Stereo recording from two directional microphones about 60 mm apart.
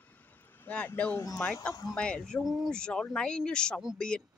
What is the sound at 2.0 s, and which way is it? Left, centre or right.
Speech, centre.